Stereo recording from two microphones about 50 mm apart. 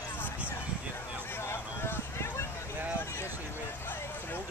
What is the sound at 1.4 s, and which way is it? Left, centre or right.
Vehicle, left.